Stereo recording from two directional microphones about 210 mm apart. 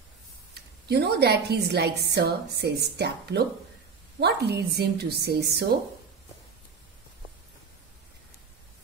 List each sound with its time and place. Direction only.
0.8 s a woman's voice: 50° right (ahead or behind)